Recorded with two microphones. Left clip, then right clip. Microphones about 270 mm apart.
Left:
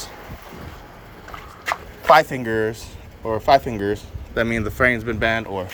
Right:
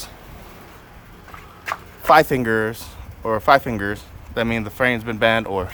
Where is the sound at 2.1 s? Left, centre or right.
Right.